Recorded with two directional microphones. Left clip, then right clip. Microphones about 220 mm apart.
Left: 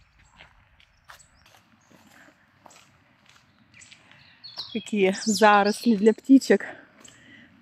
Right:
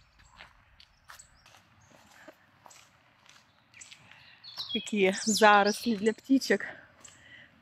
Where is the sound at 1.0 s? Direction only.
20° left (ahead or behind).